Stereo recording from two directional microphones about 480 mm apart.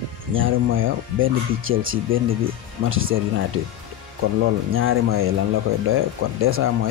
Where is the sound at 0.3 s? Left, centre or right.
Right.